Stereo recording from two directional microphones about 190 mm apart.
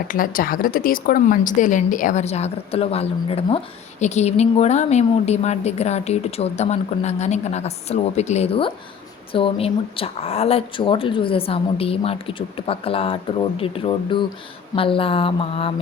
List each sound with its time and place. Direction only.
0.1 s a woman's voice: 45° left (ahead or behind); by 15.7 s 30° left (ahead or behind)